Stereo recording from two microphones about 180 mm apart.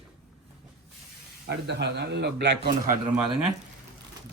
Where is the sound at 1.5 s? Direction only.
70° right (ahead or behind).